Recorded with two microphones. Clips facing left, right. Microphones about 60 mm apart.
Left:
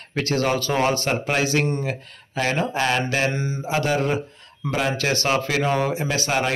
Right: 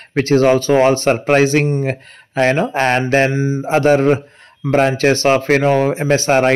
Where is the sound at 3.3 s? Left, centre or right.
Centre.